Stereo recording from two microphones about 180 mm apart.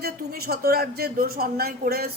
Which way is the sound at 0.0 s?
55° right (ahead or behind).